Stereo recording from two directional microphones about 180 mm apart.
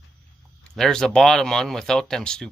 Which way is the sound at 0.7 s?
5° left (ahead or behind).